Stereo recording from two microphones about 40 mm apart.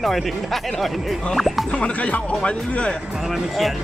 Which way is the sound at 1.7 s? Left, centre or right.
Left.